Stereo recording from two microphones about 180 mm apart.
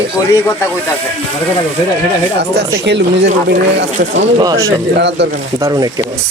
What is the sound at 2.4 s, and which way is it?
Speech, 70° right (ahead or behind).